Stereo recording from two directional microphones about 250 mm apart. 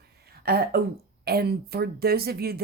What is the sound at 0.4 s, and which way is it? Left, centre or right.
Speech, right.